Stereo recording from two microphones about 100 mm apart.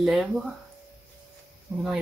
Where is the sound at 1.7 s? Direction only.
25° right (ahead or behind).